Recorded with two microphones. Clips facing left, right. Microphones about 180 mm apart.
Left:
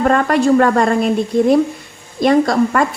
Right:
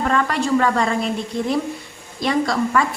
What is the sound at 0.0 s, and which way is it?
Speech, 50° left (ahead or behind).